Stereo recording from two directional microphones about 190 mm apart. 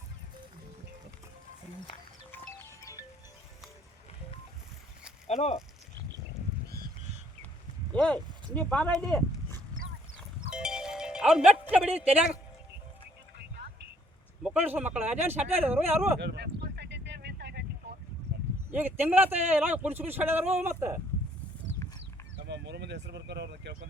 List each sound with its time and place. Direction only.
5.3 s speech: 35° left (ahead or behind)
6.7 s goose: 50° right (ahead or behind)
7.9 s speech: 5° left (ahead or behind)
10.5 s music: 5° right (ahead or behind)
11.9 s a man's voice: 10° right (ahead or behind)
14.4 s a man's voice: 10° right (ahead or behind)
16.2 s a sound: 60° right (ahead or behind)
18.7 s a man's voice: 10° right (ahead or behind)
22.4 s speech: 65° right (ahead or behind)